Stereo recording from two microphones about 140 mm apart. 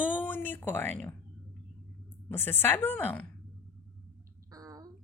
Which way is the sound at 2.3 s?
15° left (ahead or behind).